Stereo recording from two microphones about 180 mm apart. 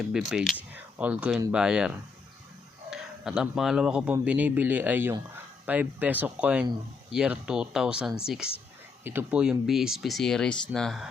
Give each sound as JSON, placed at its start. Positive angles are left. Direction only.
{"t": 0.1, "sound": "speech", "side_deg": -5}
{"t": 0.7, "sound": "a sound", "side_deg": -10}
{"t": 1.5, "sound": "a man's voice", "side_deg": -5}